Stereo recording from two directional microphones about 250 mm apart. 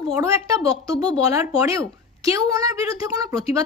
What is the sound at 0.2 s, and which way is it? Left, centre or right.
Speech, centre.